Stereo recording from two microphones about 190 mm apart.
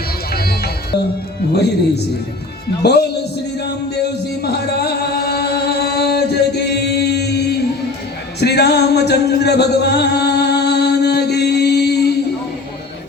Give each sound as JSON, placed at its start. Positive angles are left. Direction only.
{"t": 0.3, "sound": "music", "side_deg": 55}
{"t": 2.8, "sound": "a man's voice", "side_deg": 60}
{"t": 3.6, "sound": "music", "side_deg": 60}
{"t": 8.4, "sound": "a sound", "side_deg": 60}